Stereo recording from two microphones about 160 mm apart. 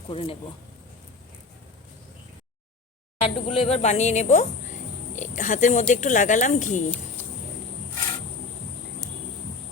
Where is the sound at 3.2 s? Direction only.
35° left (ahead or behind).